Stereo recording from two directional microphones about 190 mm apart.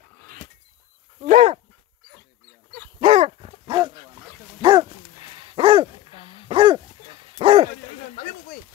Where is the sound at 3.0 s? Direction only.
35° right (ahead or behind).